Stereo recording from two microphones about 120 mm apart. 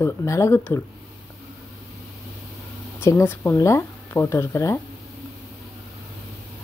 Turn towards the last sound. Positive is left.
turn(degrees=25)  # may be behind; listen again after turning